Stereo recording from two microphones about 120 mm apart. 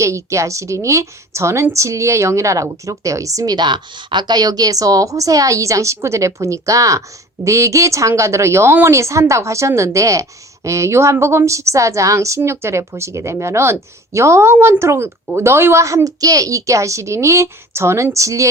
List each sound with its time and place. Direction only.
0.0 s a woman's voice: 25° right (ahead or behind)